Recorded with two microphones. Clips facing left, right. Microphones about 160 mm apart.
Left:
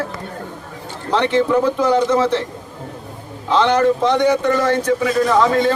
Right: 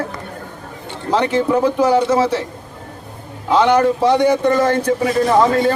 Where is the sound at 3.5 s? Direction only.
10° right (ahead or behind).